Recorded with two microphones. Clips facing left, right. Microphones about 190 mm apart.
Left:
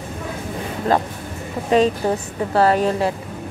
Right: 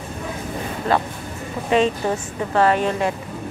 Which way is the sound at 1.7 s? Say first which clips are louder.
Left 2 dB; 40° left (ahead or behind).